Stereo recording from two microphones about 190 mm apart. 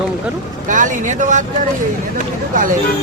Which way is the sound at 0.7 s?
40° right (ahead or behind).